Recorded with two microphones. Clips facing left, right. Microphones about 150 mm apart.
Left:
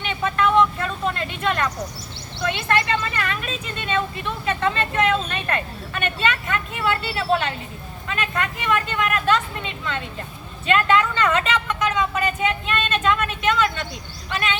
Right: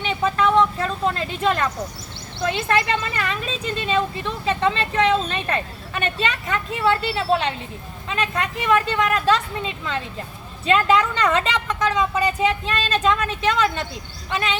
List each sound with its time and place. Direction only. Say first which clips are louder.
0.0 s vehicle: right 2 dB; 35° right (ahead or behind)
2.4 s a woman's voice: right 1 dB; 30° right (ahead or behind)